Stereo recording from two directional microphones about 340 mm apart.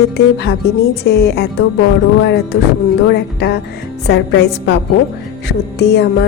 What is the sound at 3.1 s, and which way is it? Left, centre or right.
A woman's voice, left.